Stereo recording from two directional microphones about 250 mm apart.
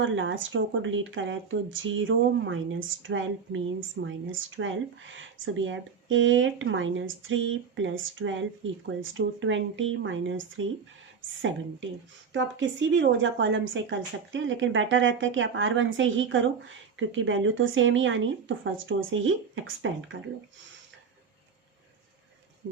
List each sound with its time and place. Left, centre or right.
0.0 s speech: right
12.3 s speech: right